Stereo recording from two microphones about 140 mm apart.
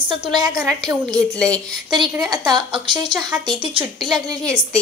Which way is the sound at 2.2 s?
30° right (ahead or behind).